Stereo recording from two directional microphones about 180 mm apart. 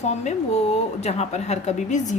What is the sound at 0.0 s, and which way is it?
Speech, 35° left (ahead or behind).